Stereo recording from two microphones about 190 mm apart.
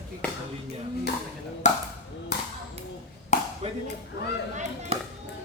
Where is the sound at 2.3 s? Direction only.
60° left (ahead or behind).